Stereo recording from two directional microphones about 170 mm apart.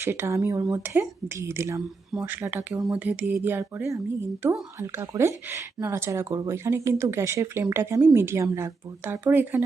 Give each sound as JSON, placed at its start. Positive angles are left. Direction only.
{"t": 0.0, "sound": "speech", "side_deg": -15}